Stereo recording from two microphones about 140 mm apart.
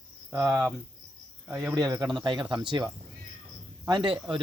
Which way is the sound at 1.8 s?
25° right (ahead or behind).